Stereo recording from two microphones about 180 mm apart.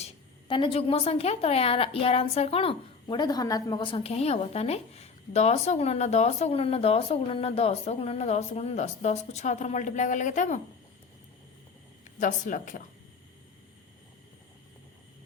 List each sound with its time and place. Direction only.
0.0 s a woman's voice: 30° left (ahead or behind)
12.2 s a woman's voice: 45° left (ahead or behind)